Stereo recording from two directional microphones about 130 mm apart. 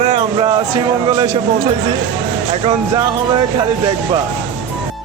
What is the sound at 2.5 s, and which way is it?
Speech, 45° right (ahead or behind).